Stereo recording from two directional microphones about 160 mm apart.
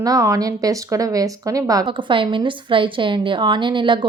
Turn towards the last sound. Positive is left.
turn(degrees=-30)  # may be behind; listen again after turning